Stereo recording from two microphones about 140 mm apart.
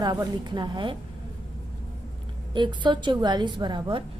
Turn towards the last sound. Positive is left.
turn(degrees=-35)  # may be behind; listen again after turning